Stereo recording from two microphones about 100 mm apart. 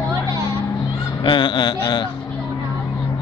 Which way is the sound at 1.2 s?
55° left (ahead or behind).